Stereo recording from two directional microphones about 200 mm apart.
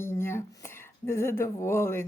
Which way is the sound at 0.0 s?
10° left (ahead or behind).